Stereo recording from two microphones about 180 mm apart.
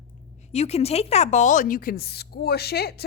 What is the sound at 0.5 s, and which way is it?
A woman's voice, 35° left (ahead or behind).